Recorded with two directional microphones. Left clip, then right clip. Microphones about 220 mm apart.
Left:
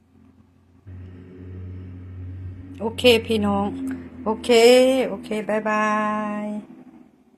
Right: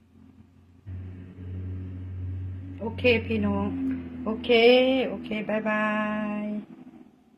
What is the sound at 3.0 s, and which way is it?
Speech, 35° left (ahead or behind).